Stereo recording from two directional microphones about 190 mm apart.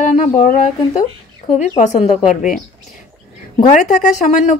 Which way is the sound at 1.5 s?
40° left (ahead or behind).